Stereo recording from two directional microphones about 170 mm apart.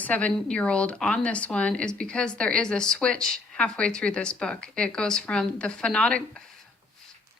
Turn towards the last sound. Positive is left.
turn(degrees=5)  # may be behind; listen again after turning